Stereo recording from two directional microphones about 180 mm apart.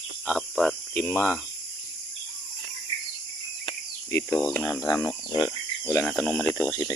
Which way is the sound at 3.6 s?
20° left (ahead or behind).